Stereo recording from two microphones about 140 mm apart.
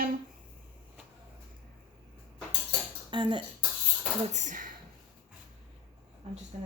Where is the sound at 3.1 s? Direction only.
35° right (ahead or behind).